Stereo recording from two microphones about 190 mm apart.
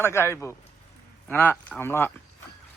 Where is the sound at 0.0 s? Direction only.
15° left (ahead or behind).